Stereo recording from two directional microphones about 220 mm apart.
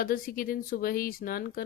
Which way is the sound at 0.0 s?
40° left (ahead or behind).